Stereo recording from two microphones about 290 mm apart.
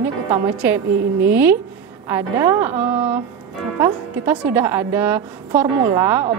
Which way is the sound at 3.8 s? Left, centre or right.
Centre.